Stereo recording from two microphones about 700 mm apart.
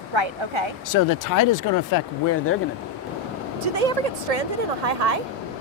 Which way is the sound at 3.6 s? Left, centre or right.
Right.